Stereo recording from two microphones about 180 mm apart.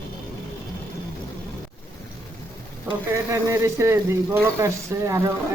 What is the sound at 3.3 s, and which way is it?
Speech, 15° right (ahead or behind).